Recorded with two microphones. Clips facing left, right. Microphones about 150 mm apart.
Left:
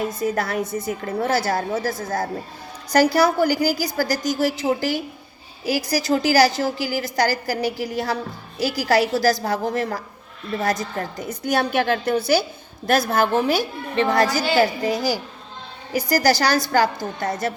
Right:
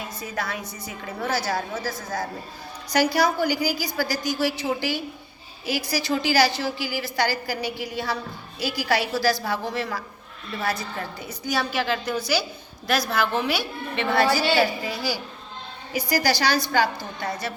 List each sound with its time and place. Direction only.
0.2 s a woman's voice: 50° left (ahead or behind)
3.2 s a woman's voice: 45° left (ahead or behind)